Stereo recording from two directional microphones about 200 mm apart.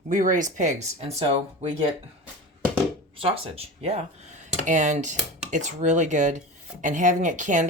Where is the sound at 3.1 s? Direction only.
25° right (ahead or behind).